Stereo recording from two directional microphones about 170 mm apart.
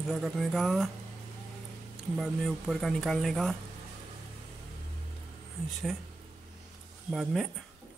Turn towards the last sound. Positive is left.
turn(degrees=0)  # may be behind; listen again after turning